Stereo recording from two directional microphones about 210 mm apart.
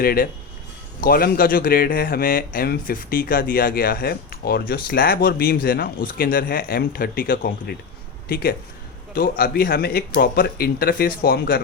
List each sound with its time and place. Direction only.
0.0 s speech: 45° left (ahead or behind)